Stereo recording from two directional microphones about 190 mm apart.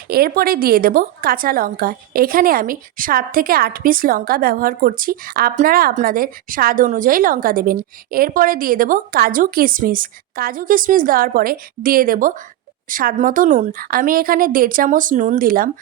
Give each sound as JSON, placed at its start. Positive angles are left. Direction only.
{"t": 0.1, "sound": "a woman's voice", "side_deg": -50}